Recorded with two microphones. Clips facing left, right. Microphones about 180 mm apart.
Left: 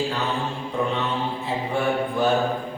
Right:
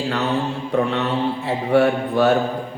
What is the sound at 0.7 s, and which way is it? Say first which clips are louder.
A man's voice: right 5 dB; 70° right (ahead or behind).